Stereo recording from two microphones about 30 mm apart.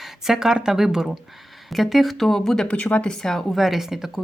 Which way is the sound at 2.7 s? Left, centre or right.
Left.